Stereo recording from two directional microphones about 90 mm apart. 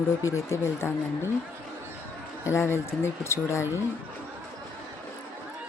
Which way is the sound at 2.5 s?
30° left (ahead or behind).